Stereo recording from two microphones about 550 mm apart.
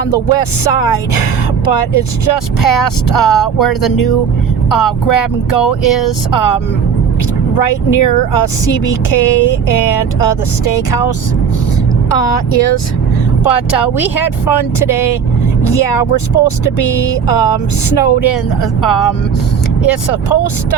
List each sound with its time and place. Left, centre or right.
0.1 s speech: left
12.1 s speech: left